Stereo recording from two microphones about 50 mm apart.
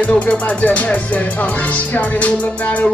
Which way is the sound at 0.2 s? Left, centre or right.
Left.